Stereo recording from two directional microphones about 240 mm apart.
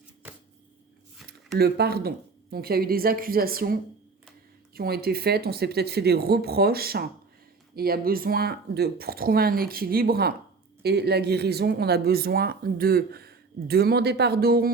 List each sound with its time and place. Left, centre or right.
1.5 s speech: right